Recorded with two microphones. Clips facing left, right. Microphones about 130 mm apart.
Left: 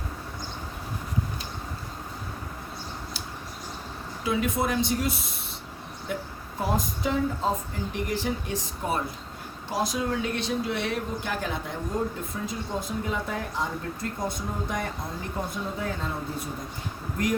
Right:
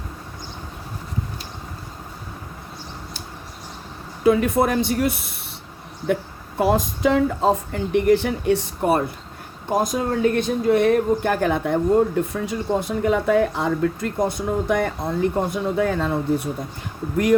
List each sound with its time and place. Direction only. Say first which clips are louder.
4.2 s speech: right 9 dB; 55° right (ahead or behind)
6.6 s speech: right 9 dB; 85° right; by 9.0 s 65° right (ahead or behind)
9.6 s speech: right 6 dB; 50° right (ahead or behind); by 16.1 s 75° right (ahead or behind)